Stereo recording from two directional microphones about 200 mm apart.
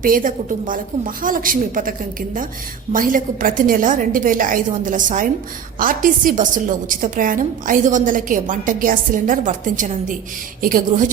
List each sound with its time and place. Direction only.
0.0 s a woman's voice: 45° right (ahead or behind)